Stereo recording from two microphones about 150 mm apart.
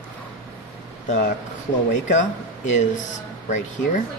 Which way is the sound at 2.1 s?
55° left (ahead or behind).